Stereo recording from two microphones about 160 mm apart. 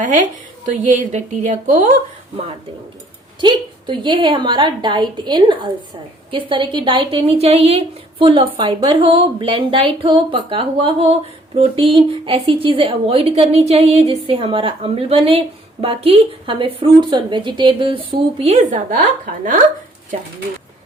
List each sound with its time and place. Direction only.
0.0 s a woman's voice: 50° right (ahead or behind)
3.4 s a woman's voice: 30° right (ahead or behind); by 19.5 s 60° right (ahead or behind)